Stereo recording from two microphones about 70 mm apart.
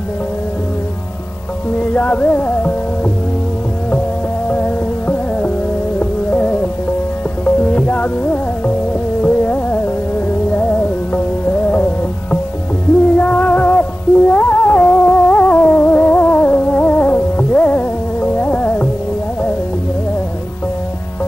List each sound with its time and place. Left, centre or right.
1.8 s music: centre
4.5 s music: left